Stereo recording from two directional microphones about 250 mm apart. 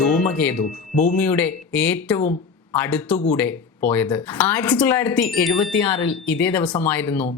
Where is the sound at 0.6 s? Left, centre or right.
Left.